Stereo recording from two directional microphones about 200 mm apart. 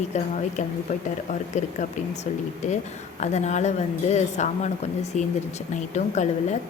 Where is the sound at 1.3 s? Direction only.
35° left (ahead or behind).